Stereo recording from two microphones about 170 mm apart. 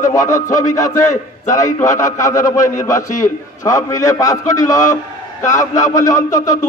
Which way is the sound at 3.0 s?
50° left (ahead or behind).